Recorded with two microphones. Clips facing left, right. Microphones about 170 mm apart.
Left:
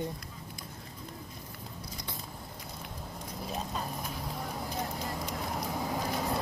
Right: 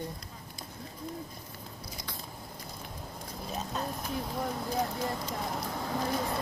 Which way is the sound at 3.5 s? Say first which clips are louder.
Right 2 dB; centre (ahead or behind).